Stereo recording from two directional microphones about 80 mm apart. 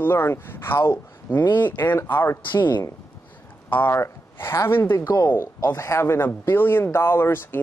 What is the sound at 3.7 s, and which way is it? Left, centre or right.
Speech, left.